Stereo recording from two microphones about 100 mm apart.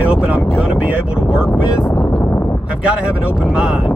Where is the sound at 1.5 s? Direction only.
20° left (ahead or behind).